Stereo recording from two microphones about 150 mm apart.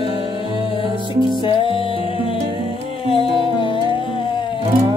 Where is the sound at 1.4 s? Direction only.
35° left (ahead or behind).